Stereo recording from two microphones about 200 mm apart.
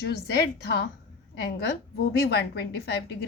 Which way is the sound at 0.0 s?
50° left (ahead or behind).